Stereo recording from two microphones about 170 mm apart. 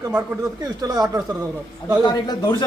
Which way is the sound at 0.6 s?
25° right (ahead or behind).